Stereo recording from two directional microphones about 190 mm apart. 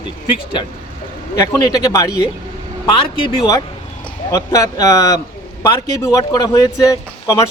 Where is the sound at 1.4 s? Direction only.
20° left (ahead or behind).